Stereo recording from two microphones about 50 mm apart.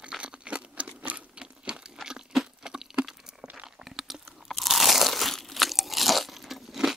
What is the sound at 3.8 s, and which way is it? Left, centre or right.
Crunch, centre.